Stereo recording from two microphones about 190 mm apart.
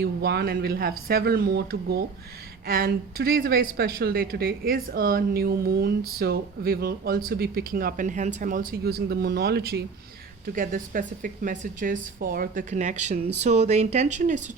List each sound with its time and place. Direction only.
0.0 s speech: 55° right (ahead or behind)
10.4 s speech: 45° right (ahead or behind)